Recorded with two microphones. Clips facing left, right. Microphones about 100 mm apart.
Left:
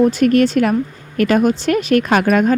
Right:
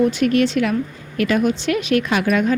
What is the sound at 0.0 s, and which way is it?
Speech, 45° left (ahead or behind).